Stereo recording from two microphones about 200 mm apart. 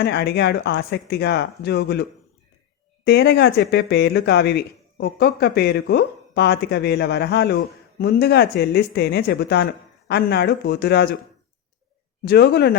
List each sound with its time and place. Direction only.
0.0 s speech: 55° left (ahead or behind)
12.2 s speech: 55° left (ahead or behind)